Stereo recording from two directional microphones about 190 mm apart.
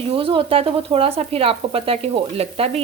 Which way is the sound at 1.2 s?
30° right (ahead or behind).